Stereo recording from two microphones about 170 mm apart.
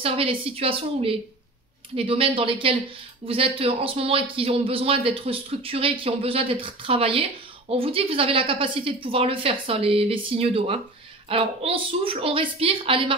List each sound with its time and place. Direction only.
0.0 s speech: 35° right (ahead or behind)